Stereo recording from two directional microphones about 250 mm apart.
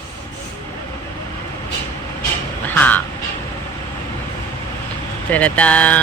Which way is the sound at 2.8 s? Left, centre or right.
Centre.